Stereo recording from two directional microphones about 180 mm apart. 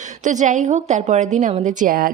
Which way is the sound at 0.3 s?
45° right (ahead or behind).